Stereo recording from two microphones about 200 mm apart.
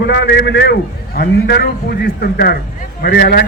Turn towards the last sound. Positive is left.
turn(degrees=50)  # may be behind; listen again after turning